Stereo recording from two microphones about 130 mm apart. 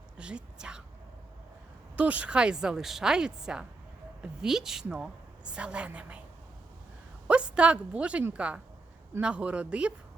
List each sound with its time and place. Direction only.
0.2 s speech: 5° right (ahead or behind)
2.0 s a woman's voice: 10° right (ahead or behind)
7.3 s speech: 10° right (ahead or behind)